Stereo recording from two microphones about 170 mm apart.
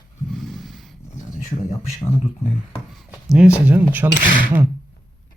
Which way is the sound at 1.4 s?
45° left (ahead or behind).